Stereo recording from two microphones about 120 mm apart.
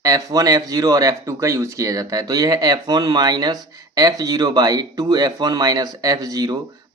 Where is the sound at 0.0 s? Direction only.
30° right (ahead or behind).